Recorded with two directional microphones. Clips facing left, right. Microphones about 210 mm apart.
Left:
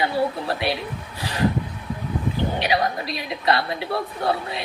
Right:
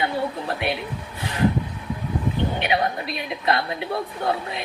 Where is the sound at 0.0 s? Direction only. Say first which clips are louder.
Left 2 dB; 35° left (ahead or behind).